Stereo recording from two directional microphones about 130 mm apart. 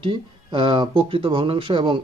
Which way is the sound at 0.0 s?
40° right (ahead or behind).